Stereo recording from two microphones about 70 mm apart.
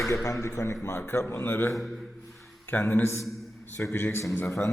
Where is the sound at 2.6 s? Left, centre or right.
Left.